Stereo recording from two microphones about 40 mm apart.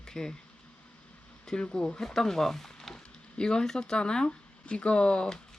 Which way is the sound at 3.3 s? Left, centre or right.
Centre.